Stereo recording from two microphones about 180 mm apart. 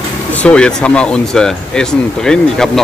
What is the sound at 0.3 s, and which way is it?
Speech, 5° left (ahead or behind).